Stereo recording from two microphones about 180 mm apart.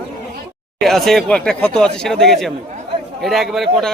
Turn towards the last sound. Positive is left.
turn(degrees=0)  # may be behind; listen again after turning